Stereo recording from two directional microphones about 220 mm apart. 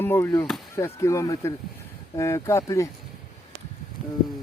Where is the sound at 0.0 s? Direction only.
10° left (ahead or behind).